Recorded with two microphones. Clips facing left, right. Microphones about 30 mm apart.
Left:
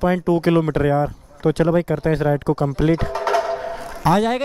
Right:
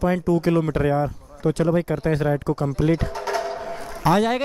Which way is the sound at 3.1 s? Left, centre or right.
Left.